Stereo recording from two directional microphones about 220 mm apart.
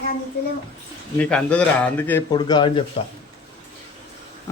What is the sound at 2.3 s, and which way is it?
Speech, 20° left (ahead or behind).